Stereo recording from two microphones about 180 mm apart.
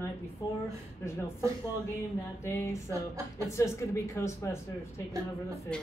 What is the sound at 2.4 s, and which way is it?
Speech, 15° left (ahead or behind).